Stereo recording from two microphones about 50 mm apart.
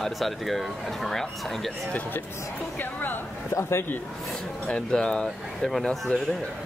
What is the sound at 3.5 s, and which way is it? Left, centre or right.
Speech, left.